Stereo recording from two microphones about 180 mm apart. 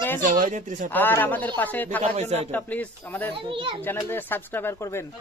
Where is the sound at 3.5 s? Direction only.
30° right (ahead or behind).